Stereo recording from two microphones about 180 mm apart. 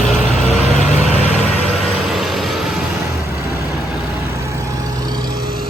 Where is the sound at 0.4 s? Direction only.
40° left (ahead or behind).